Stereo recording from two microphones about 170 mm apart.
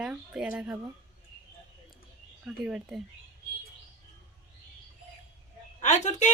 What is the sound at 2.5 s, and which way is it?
Speech, 5° right (ahead or behind).